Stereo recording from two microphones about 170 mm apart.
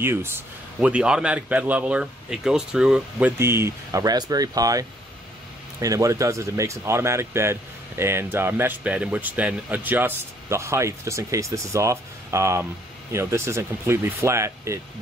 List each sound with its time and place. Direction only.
0.0 s speech: 15° right (ahead or behind)